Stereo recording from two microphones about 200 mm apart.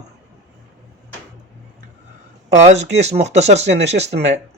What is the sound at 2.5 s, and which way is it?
Speech, 35° right (ahead or behind).